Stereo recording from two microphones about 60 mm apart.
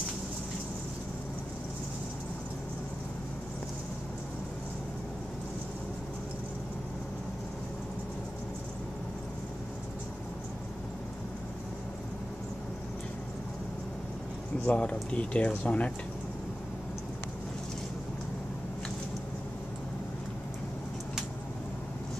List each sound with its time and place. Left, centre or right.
14.7 s speech: centre